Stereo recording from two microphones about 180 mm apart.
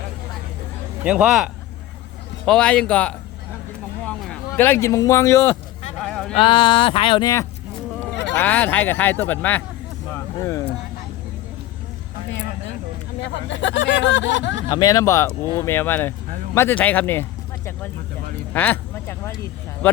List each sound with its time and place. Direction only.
1.0 s speech: 5° right (ahead or behind)
2.5 s speech: 5° left (ahead or behind)
6.0 s a sound: 5° left (ahead or behind)
6.3 s speech: 25° left (ahead or behind)
8.4 s speech: 10° left (ahead or behind)
10.1 s a sound: 15° left (ahead or behind)
13.2 s speech: 85° left
14.7 s speech: 20° left (ahead or behind)
18.5 s speech: 10° left (ahead or behind)